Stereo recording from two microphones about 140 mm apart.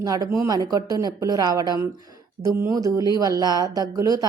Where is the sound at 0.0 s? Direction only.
25° right (ahead or behind).